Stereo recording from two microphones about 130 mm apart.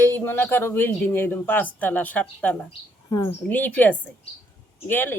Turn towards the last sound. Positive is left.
turn(degrees=15)  # may be behind; listen again after turning